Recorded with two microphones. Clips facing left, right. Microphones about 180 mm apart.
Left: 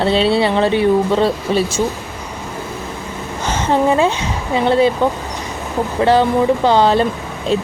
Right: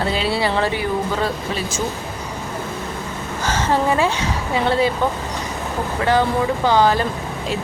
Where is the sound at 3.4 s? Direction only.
20° left (ahead or behind).